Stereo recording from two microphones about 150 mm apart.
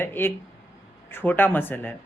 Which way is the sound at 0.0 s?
15° left (ahead or behind).